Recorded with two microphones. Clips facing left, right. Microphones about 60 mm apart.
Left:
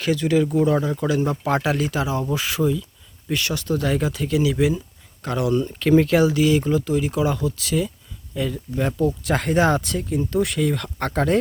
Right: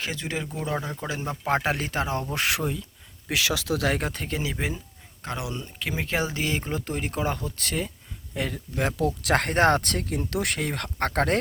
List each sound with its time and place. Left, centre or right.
0.0 s speech: right
1.6 s speech: right
2.3 s speech: right
3.2 s speech: right
3.9 s speech: right
5.2 s speech: right
6.1 s speech: right